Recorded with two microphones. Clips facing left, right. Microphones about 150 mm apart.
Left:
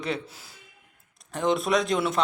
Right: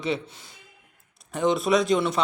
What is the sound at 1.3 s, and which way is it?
Speech, centre (ahead or behind).